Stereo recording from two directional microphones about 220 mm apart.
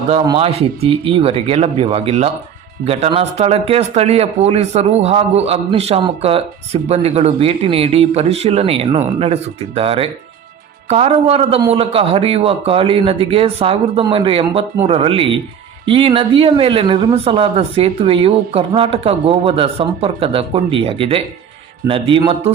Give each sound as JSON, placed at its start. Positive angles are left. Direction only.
{"t": 0.1, "sound": "speech", "side_deg": -25}